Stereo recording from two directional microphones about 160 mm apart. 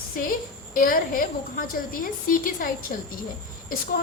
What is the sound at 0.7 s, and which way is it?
A woman's voice, 60° left (ahead or behind).